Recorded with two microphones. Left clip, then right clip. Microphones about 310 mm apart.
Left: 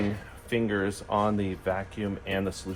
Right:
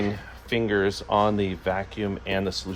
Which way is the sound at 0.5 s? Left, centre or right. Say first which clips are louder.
Right 5 dB; right.